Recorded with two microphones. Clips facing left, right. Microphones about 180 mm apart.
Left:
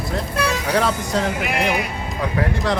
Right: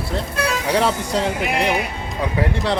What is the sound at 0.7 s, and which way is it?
Speech, 30° right (ahead or behind).